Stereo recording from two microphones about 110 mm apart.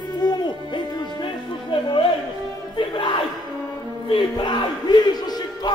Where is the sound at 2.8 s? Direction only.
45° left (ahead or behind).